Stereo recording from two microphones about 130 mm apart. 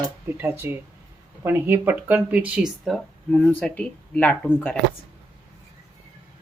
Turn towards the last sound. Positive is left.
turn(degrees=10)  # may be behind; listen again after turning